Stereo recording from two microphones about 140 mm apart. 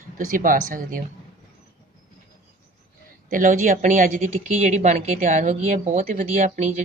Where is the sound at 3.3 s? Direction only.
75° right (ahead or behind).